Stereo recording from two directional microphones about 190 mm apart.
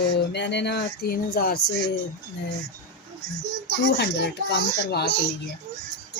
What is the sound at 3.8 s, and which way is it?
Speech, 60° left (ahead or behind).